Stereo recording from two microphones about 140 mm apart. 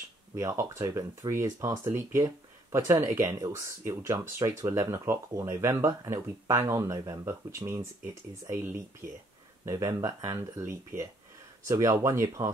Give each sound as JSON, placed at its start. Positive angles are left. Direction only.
{"t": 0.4, "sound": "speech", "side_deg": -20}